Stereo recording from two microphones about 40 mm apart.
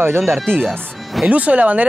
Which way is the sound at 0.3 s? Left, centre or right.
Right.